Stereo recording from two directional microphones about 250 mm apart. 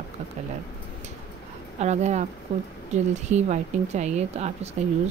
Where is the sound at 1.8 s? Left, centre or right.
Right.